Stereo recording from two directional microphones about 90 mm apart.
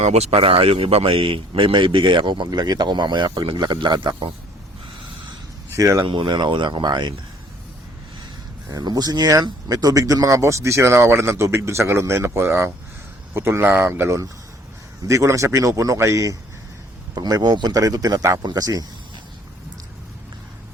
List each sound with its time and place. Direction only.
0.3 s speech: 90° right; by 4.1 s 60° right (ahead or behind)
5.7 s speech: 35° right (ahead or behind)
6.1 s speech: 60° right (ahead or behind)
8.7 s speech: 50° right (ahead or behind)
17.2 s a man's voice: 50° right (ahead or behind)